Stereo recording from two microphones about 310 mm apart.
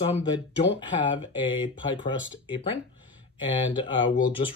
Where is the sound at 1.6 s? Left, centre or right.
Centre.